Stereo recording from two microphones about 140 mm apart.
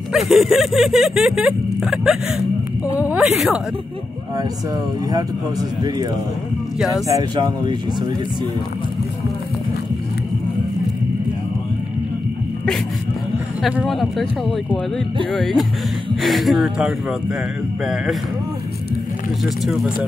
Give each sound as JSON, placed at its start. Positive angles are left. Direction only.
{"t": 0.1, "sound": "speech", "side_deg": 0}
{"t": 5.1, "sound": "speech", "side_deg": -25}
{"t": 7.1, "sound": "speech", "side_deg": -30}
{"t": 13.6, "sound": "speech", "side_deg": -5}
{"t": 15.3, "sound": "speech", "side_deg": 0}
{"t": 19.6, "sound": "speech", "side_deg": -5}